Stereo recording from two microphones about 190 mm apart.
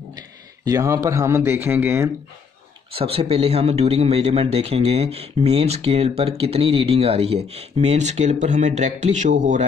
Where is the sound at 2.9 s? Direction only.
30° right (ahead or behind).